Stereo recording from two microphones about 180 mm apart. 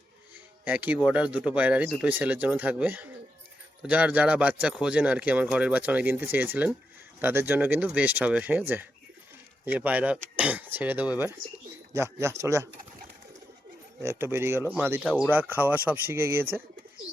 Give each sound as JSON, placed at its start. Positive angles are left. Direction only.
{"t": 0.6, "sound": "speech", "side_deg": -10}
{"t": 14.0, "sound": "speech", "side_deg": -15}